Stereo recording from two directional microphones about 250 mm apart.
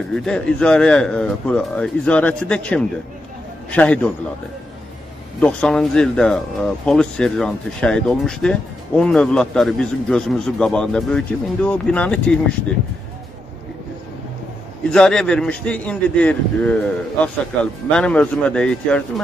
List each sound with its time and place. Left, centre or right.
0.1 s speech: centre
5.4 s speech: centre
14.9 s speech: centre